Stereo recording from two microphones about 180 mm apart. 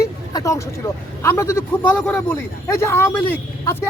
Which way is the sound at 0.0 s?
15° left (ahead or behind).